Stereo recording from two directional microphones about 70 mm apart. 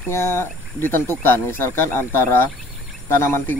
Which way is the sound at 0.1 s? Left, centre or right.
Left.